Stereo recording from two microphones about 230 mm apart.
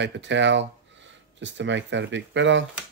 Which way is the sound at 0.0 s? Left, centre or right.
Right.